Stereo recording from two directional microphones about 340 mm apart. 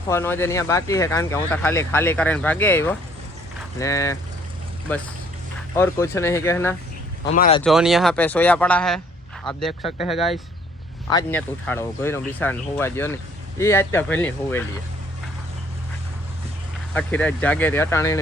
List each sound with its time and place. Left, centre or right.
0.1 s speech: centre
5.7 s speech: centre
7.3 s speech: left
7.6 s speech: centre
16.9 s speech: centre